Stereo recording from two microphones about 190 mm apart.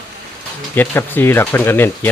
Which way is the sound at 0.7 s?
10° left (ahead or behind).